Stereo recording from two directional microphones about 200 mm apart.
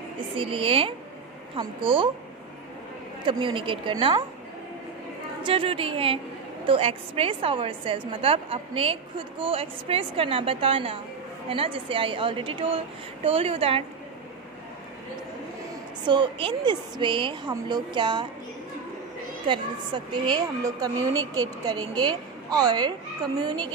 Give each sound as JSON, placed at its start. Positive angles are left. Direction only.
{"t": 0.4, "sound": "a woman's voice", "side_deg": -25}
{"t": 3.3, "sound": "a woman's voice", "side_deg": -25}
{"t": 5.4, "sound": "a woman's voice", "side_deg": -25}
{"t": 16.1, "sound": "a woman's voice", "side_deg": -25}
{"t": 19.4, "sound": "a woman's voice", "side_deg": -25}